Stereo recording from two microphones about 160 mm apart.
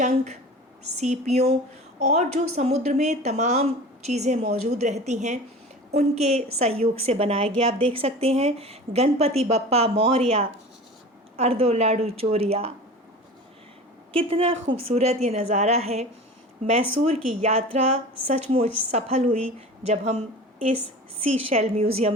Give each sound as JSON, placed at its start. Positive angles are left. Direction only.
{"t": 0.9, "sound": "a woman's voice", "side_deg": -45}
{"t": 14.1, "sound": "a woman's voice", "side_deg": -35}
{"t": 21.5, "sound": "a woman's voice", "side_deg": -40}